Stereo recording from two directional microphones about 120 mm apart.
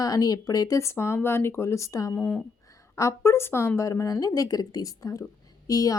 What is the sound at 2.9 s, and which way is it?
A woman's voice, 25° left (ahead or behind).